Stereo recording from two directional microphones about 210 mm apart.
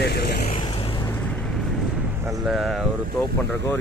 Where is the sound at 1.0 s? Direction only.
10° left (ahead or behind).